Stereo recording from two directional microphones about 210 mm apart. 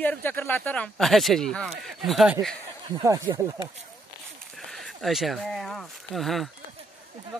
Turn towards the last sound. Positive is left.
turn(degrees=0)  # may be behind; listen again after turning